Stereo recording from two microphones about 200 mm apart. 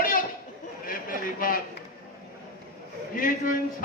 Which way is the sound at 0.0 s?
45° left (ahead or behind).